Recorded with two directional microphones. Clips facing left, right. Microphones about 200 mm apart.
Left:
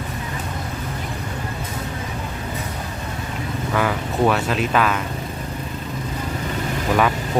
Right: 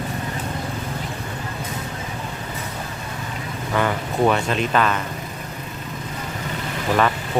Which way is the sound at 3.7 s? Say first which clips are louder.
Even; centre (ahead or behind).